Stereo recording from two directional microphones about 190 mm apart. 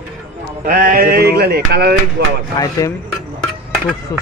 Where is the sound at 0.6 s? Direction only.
50° right (ahead or behind).